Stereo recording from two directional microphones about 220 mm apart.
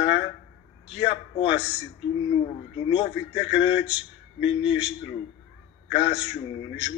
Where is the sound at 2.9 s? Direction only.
25° left (ahead or behind).